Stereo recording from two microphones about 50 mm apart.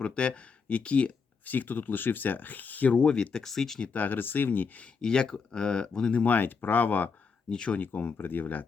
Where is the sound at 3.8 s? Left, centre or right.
Left.